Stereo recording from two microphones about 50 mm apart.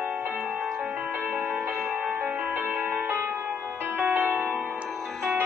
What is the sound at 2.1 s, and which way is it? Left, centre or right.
Music, right.